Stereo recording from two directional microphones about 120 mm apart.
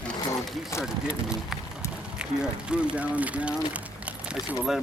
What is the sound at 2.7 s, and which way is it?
Speech, 10° right (ahead or behind).